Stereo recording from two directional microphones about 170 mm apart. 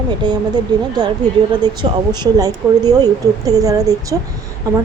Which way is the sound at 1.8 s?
25° right (ahead or behind).